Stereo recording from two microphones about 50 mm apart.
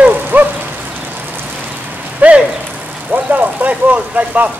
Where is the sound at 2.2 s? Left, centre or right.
Right.